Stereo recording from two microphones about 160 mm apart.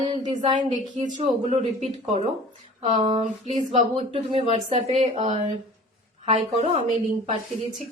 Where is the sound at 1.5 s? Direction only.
40° right (ahead or behind).